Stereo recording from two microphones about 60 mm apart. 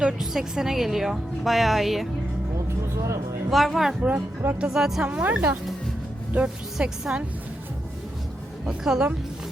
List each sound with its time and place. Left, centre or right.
0.0 s speech: centre
2.6 s music: right
3.5 s speech: centre
4.0 s speech: right
4.6 s a woman's voice: centre
5.0 s a woman's voice: right
8.6 s a woman's voice: centre